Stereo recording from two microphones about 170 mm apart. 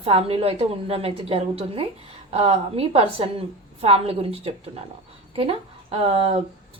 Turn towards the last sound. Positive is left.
turn(degrees=-35)  # may be behind; listen again after turning